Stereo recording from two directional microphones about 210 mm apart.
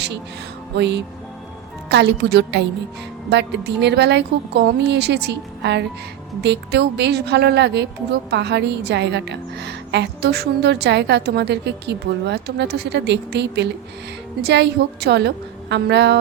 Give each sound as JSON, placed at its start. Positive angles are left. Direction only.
{"t": 0.8, "sound": "a woman's voice", "side_deg": -55}